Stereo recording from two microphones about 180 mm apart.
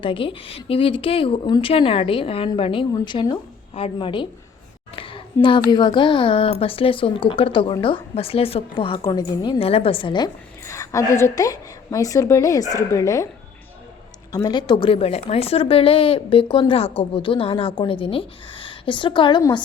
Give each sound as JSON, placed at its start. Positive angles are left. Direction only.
{"t": 0.0, "sound": "a woman's voice", "side_deg": 30}
{"t": 14.3, "sound": "a woman's voice", "side_deg": 25}